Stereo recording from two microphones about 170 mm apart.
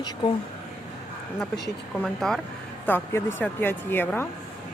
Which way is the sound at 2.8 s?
10° left (ahead or behind).